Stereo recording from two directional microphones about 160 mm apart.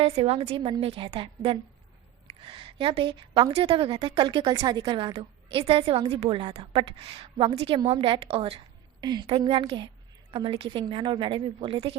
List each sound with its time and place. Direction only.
0.0 s a woman's voice: 40° right (ahead or behind)